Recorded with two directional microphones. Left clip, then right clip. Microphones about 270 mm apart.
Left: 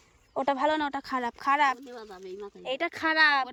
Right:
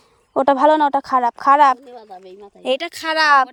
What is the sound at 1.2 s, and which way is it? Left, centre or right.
Speech, right.